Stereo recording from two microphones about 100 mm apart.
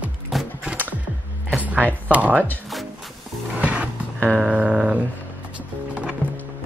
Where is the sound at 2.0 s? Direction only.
15° right (ahead or behind).